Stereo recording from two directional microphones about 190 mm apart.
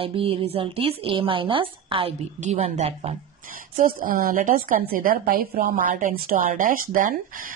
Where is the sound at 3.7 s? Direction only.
45° right (ahead or behind).